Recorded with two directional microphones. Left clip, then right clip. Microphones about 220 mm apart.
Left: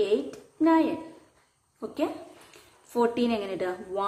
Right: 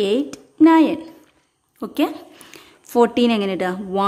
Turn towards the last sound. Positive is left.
turn(degrees=-55)  # may be behind; listen again after turning